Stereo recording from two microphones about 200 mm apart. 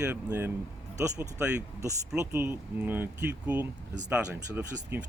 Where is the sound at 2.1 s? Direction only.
15° right (ahead or behind).